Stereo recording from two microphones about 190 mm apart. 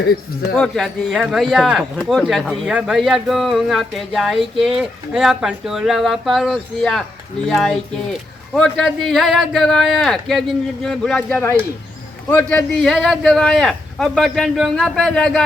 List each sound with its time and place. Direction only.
0.5 s speech: centre (ahead or behind)